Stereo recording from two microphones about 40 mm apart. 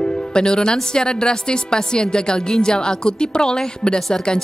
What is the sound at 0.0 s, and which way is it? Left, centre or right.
Music, left.